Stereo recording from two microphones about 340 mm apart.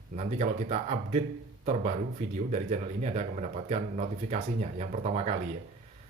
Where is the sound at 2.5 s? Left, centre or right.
Centre.